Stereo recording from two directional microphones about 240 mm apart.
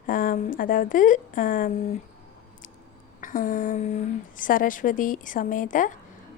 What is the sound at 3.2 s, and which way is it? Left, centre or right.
A woman's voice, left.